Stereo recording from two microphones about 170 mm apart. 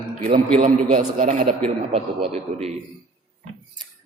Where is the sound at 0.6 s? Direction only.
50° right (ahead or behind).